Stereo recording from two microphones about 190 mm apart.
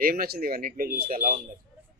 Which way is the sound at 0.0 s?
50° right (ahead or behind).